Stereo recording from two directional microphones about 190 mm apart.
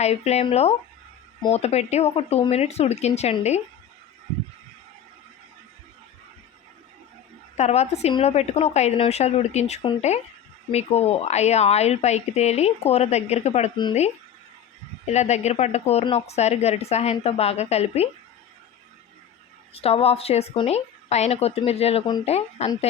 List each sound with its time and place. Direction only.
0.0 s a woman's voice: 35° left (ahead or behind)
7.5 s a woman's voice: 35° left (ahead or behind)
15.0 s a woman's voice: 35° left (ahead or behind)
19.7 s a woman's voice: 30° left (ahead or behind)